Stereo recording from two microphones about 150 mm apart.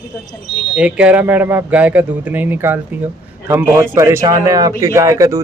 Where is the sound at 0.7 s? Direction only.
10° right (ahead or behind).